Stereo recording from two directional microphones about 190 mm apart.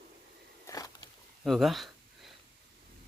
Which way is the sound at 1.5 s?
Centre (ahead or behind).